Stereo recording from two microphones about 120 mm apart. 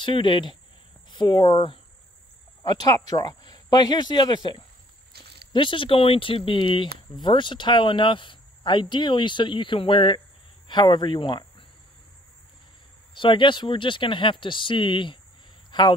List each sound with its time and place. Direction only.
0.0 s speech: 40° left (ahead or behind)
13.1 s speech: 45° left (ahead or behind)